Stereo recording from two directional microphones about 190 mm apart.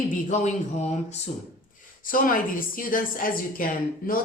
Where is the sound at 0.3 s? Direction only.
40° left (ahead or behind).